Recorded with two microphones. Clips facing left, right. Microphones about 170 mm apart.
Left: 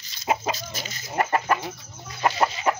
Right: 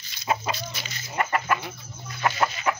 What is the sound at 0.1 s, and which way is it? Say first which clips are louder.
Chicken: left 2 dB; 45° left (ahead or behind).